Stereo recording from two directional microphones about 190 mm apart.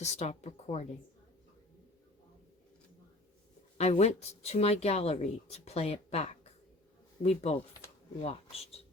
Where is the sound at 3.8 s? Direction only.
35° left (ahead or behind).